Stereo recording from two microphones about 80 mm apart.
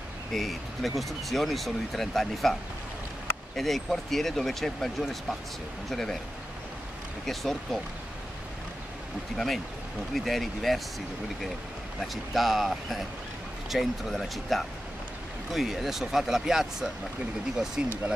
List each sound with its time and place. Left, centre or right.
0.3 s speech: centre
3.5 s speech: centre
7.2 s speech: centre
10.1 s speech: centre
12.0 s speech: centre
17.8 s speech: centre